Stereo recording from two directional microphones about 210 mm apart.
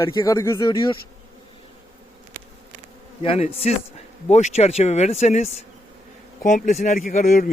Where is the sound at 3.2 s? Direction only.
30° left (ahead or behind).